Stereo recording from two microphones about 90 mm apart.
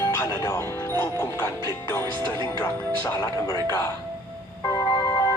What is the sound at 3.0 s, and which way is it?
Speech, 45° left (ahead or behind).